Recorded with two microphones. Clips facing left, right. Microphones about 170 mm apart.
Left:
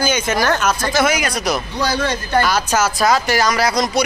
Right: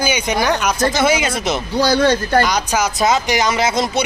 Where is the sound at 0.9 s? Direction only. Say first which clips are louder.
Right 1 dB; 25° right (ahead or behind).